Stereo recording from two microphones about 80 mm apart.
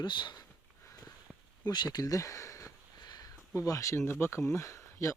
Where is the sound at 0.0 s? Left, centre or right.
Left.